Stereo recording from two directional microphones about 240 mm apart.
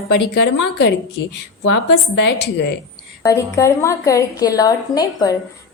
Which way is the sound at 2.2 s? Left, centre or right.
Left.